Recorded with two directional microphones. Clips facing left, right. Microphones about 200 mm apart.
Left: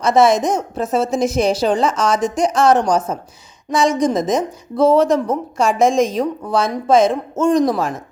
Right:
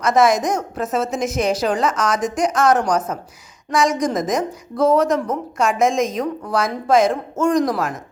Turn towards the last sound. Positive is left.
turn(degrees=25)  # may be behind; listen again after turning